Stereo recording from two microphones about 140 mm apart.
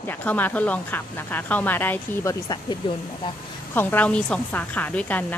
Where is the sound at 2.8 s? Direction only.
40° left (ahead or behind).